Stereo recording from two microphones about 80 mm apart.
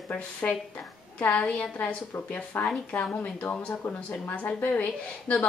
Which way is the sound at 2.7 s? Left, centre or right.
Centre.